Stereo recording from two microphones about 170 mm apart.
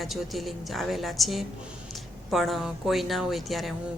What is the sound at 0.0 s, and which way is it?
Speech, centre (ahead or behind).